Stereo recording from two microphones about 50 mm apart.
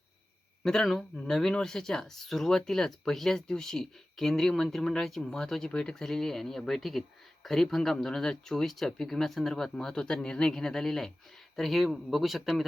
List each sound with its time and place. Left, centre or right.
0.6 s speech: centre